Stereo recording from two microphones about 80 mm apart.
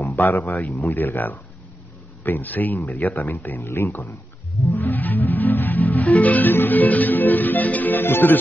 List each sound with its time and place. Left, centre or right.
0.1 s speech: left
4.7 s music: left